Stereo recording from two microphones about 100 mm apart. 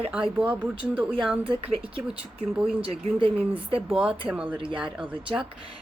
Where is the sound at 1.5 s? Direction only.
65° right (ahead or behind).